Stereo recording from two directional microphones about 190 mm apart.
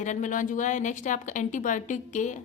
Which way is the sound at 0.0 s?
40° left (ahead or behind).